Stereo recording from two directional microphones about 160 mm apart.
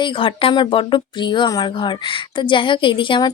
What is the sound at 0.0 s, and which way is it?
Speech, 35° left (ahead or behind).